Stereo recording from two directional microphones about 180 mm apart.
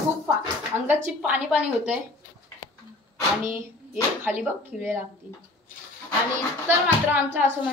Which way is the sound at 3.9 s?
5° right (ahead or behind).